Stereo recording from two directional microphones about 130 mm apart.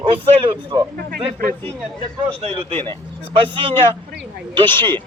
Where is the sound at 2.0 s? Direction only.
45° right (ahead or behind).